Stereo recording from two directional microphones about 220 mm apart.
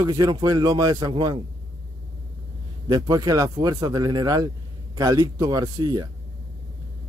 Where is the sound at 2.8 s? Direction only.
20° right (ahead or behind).